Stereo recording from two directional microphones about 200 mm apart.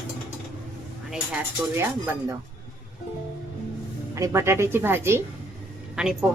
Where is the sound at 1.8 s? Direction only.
15° right (ahead or behind).